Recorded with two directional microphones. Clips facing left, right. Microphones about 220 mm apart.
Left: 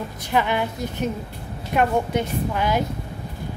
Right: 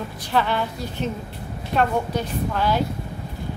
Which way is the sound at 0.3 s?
15° left (ahead or behind).